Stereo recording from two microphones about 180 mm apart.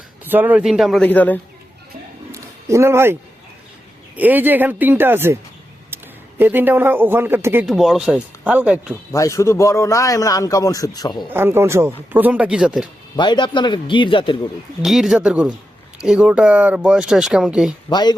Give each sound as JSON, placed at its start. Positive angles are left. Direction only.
{"t": 0.3, "sound": "speech", "side_deg": -10}
{"t": 1.0, "sound": "a man's voice", "side_deg": 10}
{"t": 2.3, "sound": "a sound", "side_deg": -15}
{"t": 4.1, "sound": "speech", "side_deg": -10}
{"t": 5.9, "sound": "a sound", "side_deg": -10}
{"t": 6.4, "sound": "speech", "side_deg": -10}
{"t": 9.1, "sound": "a man's voice", "side_deg": 15}
{"t": 11.3, "sound": "speech", "side_deg": -10}
{"t": 13.1, "sound": "a man's voice", "side_deg": 25}
{"t": 14.8, "sound": "speech", "side_deg": 0}
{"t": 17.8, "sound": "a man's voice", "side_deg": 25}